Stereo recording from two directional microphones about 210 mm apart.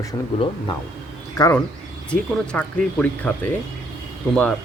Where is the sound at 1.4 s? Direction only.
15° left (ahead or behind).